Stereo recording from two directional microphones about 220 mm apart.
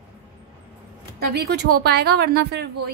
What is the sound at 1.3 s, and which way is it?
A woman's voice, 45° right (ahead or behind).